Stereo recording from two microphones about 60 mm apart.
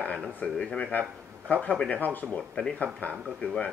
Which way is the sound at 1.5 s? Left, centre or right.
Left.